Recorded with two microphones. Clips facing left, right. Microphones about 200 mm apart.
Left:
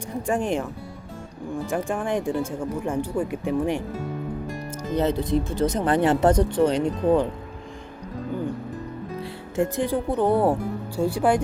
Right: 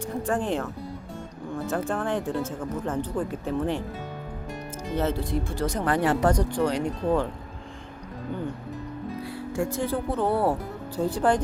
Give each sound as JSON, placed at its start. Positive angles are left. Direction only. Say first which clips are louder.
{"t": 0.3, "sound": "speech", "louder": "left 3 dB", "side_deg": 15}
{"t": 4.9, "sound": "speech", "louder": "left 4 dB", "side_deg": 20}
{"t": 9.6, "sound": "speech", "louder": "left 4 dB", "side_deg": 15}